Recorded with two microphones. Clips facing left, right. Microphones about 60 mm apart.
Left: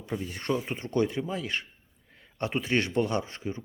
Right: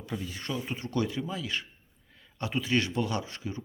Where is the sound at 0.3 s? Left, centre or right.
Left.